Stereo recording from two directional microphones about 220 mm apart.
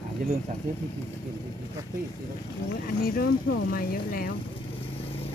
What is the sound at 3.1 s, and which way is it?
Speech, 45° left (ahead or behind).